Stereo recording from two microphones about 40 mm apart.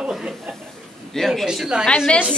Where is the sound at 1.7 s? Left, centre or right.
Right.